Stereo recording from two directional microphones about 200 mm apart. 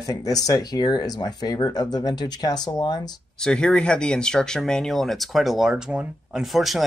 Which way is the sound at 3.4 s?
5° left (ahead or behind).